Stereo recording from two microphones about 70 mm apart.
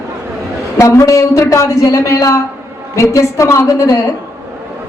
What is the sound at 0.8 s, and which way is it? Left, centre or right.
A man's voice, left.